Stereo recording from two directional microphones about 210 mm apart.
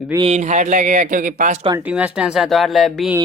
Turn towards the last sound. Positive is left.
turn(degrees=0)  # may be behind; listen again after turning